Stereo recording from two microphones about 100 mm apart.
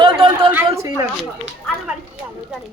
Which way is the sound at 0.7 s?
30° right (ahead or behind).